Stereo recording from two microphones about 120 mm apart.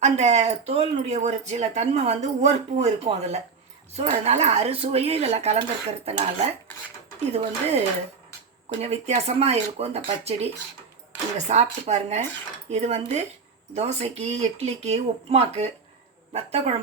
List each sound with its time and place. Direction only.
0.0 s speech: 70° right (ahead or behind)
8.8 s speech: 65° right (ahead or behind)